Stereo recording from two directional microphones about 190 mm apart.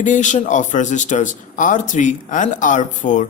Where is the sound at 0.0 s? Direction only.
40° left (ahead or behind).